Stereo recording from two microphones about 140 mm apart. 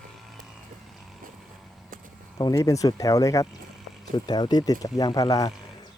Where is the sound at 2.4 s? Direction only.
25° left (ahead or behind).